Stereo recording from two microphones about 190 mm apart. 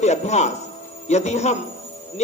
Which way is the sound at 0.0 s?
35° left (ahead or behind).